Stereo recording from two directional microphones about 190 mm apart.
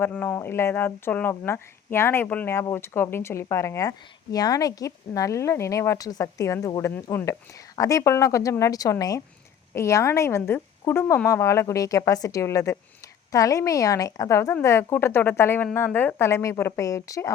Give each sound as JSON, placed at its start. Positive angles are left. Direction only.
{"t": 0.0, "sound": "speech", "side_deg": 10}